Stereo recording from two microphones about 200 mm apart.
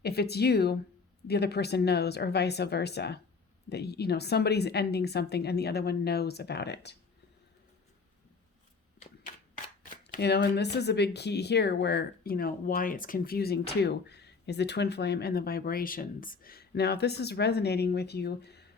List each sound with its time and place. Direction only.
0.0 s speech: 55° left (ahead or behind)
10.2 s speech: 55° left (ahead or behind)